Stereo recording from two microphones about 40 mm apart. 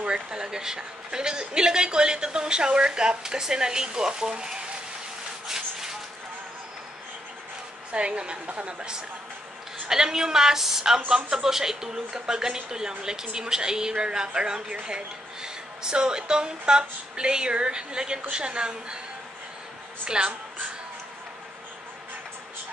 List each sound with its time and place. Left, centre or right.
0.0 s speech: centre
5.5 s a sound: centre
7.9 s a woman's voice: right
9.8 s a woman's voice: centre
11.1 s speech: right
20.1 s speech: right